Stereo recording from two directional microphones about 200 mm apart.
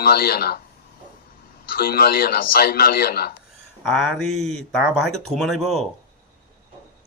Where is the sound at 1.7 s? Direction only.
50° left (ahead or behind).